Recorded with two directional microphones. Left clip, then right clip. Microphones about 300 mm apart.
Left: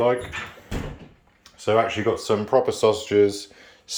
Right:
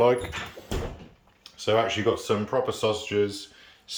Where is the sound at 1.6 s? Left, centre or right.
Centre.